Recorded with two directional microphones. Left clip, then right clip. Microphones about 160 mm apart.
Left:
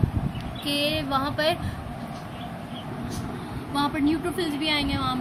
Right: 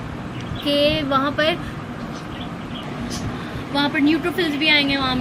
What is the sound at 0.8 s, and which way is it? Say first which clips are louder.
Speech: right 7 dB; 25° left (ahead or behind).